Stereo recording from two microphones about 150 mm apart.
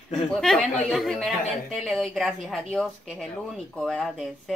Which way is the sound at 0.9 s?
Centre (ahead or behind).